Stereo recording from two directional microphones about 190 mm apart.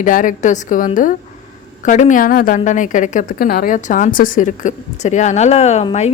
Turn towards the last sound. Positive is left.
turn(degrees=35)  # may be behind; listen again after turning